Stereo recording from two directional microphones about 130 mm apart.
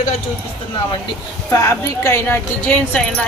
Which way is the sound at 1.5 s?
25° left (ahead or behind).